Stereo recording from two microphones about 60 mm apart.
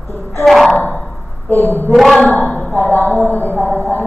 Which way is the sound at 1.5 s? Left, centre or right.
Right.